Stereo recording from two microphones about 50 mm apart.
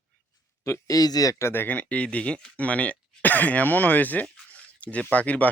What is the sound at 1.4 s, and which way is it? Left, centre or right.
Speech, left.